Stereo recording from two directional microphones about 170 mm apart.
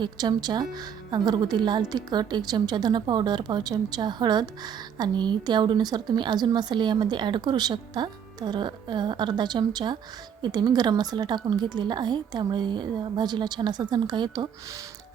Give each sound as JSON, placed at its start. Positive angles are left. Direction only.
{"t": 0.0, "sound": "speech", "side_deg": -25}